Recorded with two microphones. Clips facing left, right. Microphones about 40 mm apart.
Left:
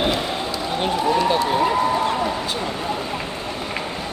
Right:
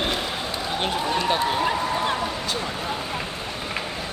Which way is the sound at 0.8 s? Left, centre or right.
Centre.